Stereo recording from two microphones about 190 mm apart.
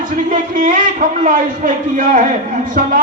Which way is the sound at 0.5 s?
45° right (ahead or behind).